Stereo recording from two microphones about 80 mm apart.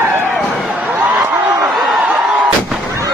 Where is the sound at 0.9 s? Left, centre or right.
Right.